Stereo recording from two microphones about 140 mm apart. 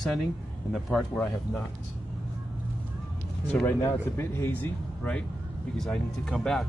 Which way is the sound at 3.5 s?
10° left (ahead or behind).